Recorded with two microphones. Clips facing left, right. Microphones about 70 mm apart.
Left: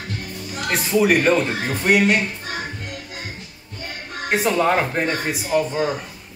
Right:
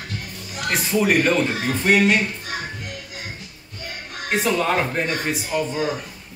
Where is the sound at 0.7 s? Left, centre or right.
Centre.